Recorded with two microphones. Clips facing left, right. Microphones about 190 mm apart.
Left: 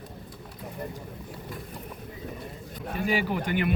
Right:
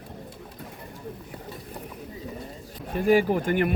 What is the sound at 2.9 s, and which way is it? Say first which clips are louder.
Speech: right 7 dB; 50° right (ahead or behind).